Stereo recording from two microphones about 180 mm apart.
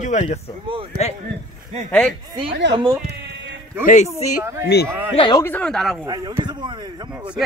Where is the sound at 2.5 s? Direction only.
80° right.